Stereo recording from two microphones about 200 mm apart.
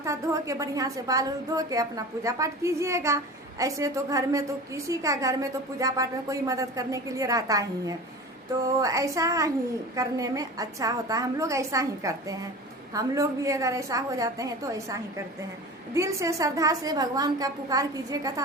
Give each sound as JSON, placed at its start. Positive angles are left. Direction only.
{"t": 0.0, "sound": "a woman's voice", "side_deg": -15}
{"t": 16.0, "sound": "a woman's voice", "side_deg": -15}